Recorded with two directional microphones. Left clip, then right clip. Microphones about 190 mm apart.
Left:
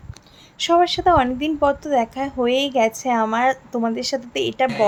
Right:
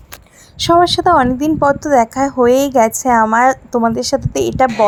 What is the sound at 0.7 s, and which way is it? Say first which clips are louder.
A woman's voice: right 5 dB; 35° right (ahead or behind).